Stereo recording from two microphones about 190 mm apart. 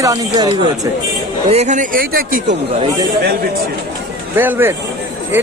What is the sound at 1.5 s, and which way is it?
Speech, 35° right (ahead or behind).